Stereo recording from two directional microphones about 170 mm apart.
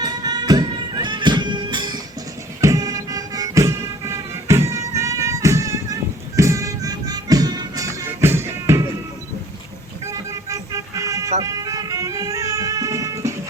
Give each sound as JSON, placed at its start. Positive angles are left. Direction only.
{"t": 0.0, "sound": "music", "side_deg": -25}
{"t": 10.1, "sound": "vehicle", "side_deg": -20}
{"t": 11.3, "sound": "music", "side_deg": -20}